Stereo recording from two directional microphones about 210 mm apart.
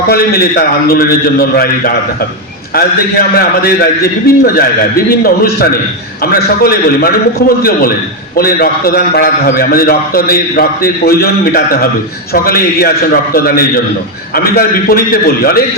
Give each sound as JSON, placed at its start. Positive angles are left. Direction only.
{"t": 0.1, "sound": "a man's voice", "side_deg": 45}
{"t": 8.4, "sound": "a man's voice", "side_deg": 45}